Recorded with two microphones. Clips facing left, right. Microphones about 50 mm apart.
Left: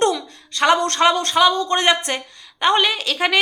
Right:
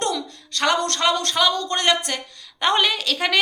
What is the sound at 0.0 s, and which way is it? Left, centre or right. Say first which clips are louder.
A woman's voice: left 6 dB; centre.